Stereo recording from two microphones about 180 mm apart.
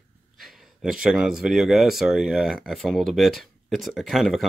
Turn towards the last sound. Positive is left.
turn(degrees=0)  # may be behind; listen again after turning